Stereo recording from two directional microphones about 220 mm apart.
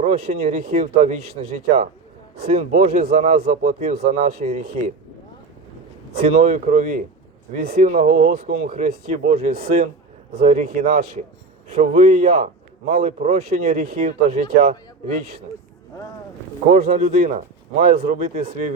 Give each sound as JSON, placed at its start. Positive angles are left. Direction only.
{"t": 0.0, "sound": "speech", "side_deg": -30}
{"t": 6.2, "sound": "a man's voice", "side_deg": -35}
{"t": 16.6, "sound": "speech", "side_deg": -30}